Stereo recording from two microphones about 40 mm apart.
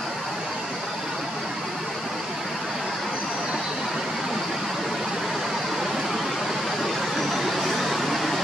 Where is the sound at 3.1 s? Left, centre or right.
Right.